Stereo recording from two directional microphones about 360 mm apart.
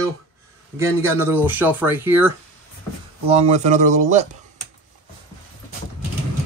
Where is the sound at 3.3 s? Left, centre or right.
Centre.